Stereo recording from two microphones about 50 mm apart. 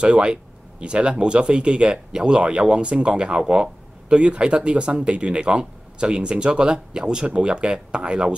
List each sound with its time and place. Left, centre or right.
0.0 s speech: right